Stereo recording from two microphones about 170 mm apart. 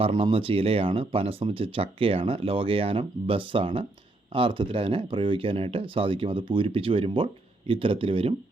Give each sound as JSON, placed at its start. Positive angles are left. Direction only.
{"t": 0.0, "sound": "speech", "side_deg": -30}